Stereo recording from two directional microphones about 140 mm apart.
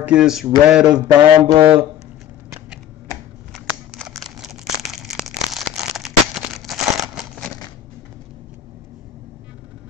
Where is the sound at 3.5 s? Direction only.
Centre (ahead or behind).